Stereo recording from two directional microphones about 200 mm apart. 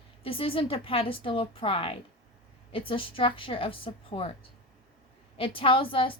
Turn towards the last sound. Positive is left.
turn(degrees=25)  # may be behind; listen again after turning